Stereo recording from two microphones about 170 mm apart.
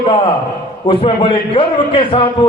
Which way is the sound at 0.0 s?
30° left (ahead or behind).